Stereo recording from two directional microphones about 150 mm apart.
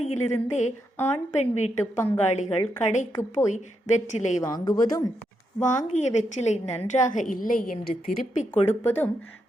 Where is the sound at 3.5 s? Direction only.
55° left (ahead or behind).